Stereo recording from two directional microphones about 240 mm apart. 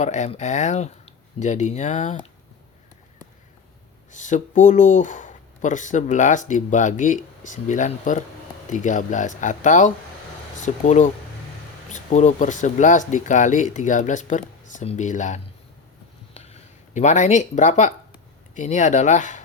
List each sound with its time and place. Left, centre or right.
0.0 s speech: left
4.1 s speech: left
16.3 s a sound: left
18.5 s speech: left